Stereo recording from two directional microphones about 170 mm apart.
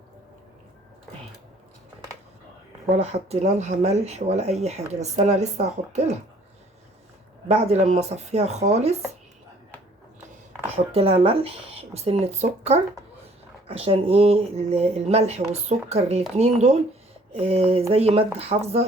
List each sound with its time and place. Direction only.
2.9 s speech: 40° right (ahead or behind)
7.4 s speech: 40° right (ahead or behind)
10.9 s speech: 35° right (ahead or behind)